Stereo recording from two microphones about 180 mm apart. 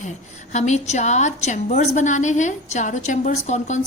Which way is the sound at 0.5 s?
40° left (ahead or behind).